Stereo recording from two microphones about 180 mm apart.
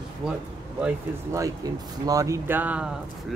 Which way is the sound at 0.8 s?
15° right (ahead or behind).